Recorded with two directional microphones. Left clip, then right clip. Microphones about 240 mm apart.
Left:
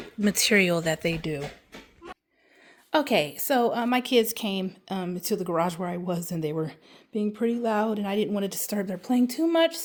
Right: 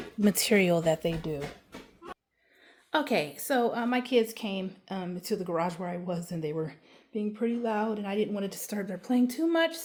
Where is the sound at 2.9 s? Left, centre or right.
Left.